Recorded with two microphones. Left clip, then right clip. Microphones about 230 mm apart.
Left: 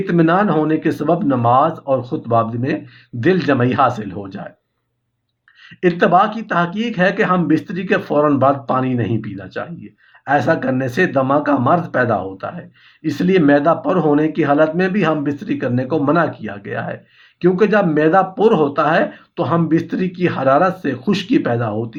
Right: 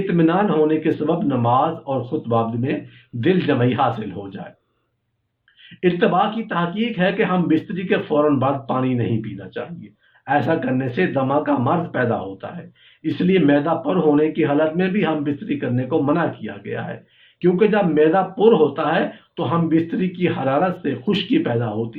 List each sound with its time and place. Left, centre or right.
0.1 s speech: left
5.8 s speech: left